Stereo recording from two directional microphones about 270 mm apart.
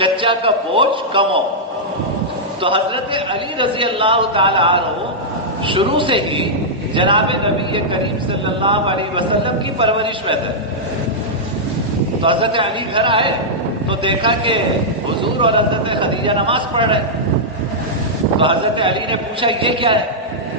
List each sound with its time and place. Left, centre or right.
0.0 s a man's voice: centre
2.6 s a man's voice: centre
12.2 s a man's voice: centre
18.3 s a man's voice: centre